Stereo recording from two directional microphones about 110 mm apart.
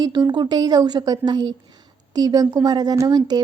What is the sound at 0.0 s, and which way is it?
A woman's voice, 40° right (ahead or behind).